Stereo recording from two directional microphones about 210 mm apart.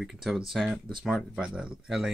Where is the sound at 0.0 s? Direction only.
Centre (ahead or behind).